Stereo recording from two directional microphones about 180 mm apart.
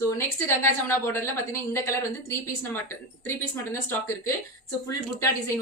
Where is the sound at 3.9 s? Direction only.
15° left (ahead or behind).